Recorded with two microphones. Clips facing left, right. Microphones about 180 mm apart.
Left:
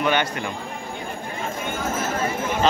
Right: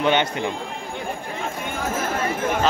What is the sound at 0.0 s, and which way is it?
Speech, 20° right (ahead or behind).